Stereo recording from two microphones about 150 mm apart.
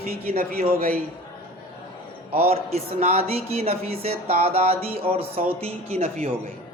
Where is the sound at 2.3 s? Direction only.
45° right (ahead or behind).